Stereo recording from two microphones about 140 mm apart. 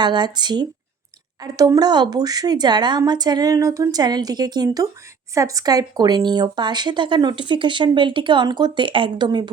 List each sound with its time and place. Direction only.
0.0 s a woman's voice: 30° right (ahead or behind)